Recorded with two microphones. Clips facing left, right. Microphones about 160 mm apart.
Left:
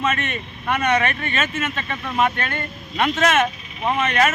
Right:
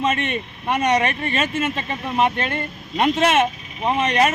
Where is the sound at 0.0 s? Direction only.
30° right (ahead or behind).